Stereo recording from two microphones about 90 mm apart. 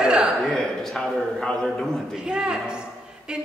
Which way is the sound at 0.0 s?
10° right (ahead or behind).